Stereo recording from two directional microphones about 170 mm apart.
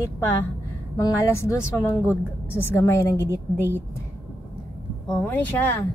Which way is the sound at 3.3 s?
15° right (ahead or behind).